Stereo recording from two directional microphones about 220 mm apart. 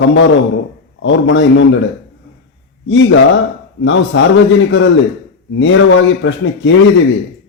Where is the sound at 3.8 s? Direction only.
60° left (ahead or behind).